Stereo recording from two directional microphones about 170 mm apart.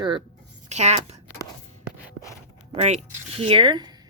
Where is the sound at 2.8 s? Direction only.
40° right (ahead or behind).